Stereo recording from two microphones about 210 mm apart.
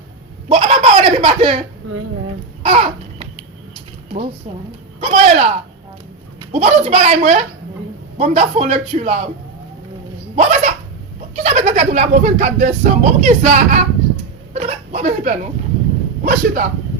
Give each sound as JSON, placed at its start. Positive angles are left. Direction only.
{"t": 0.4, "sound": "a sound", "side_deg": -25}
{"t": 2.6, "sound": "babbling", "side_deg": -25}
{"t": 4.9, "sound": "a woman's voice", "side_deg": -30}
{"t": 10.3, "sound": "a child's voice", "side_deg": -30}